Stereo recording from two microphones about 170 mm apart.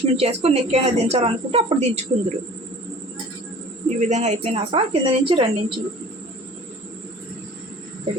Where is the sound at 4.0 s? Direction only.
45° right (ahead or behind).